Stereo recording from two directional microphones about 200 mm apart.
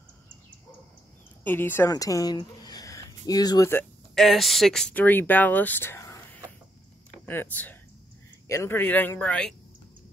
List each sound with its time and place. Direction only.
1.4 s a woman's voice: 10° left (ahead or behind)
4.1 s speech: centre (ahead or behind)
7.2 s speech: 10° left (ahead or behind)